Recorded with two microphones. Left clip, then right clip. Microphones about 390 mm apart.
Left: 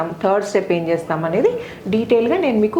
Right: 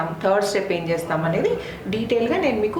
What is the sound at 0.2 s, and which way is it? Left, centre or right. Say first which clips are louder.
A woman's voice: left 2 dB; left.